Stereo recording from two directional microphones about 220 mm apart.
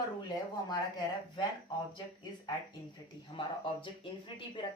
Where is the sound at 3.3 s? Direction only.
20° left (ahead or behind).